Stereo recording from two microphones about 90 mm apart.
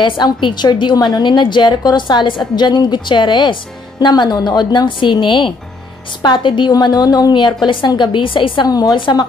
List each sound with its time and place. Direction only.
0.0 s a woman's voice: 65° left (ahead or behind)
6.7 s a woman's voice: 50° left (ahead or behind); by 8.6 s 65° left (ahead or behind)
8.6 s speech: 45° left (ahead or behind)
8.9 s a woman's voice: 65° left (ahead or behind)